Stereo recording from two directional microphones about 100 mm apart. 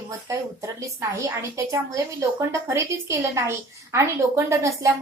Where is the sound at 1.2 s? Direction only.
30° right (ahead or behind).